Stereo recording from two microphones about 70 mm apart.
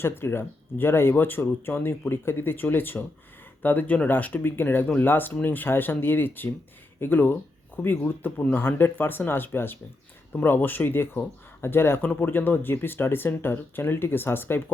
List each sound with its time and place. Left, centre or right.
0.0 s speech: left